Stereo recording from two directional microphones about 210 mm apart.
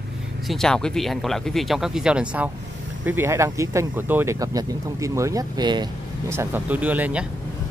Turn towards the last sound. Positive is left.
turn(degrees=-5)  # may be behind; listen again after turning